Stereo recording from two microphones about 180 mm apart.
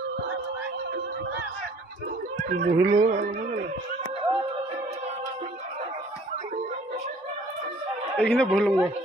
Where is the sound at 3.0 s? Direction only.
45° right (ahead or behind).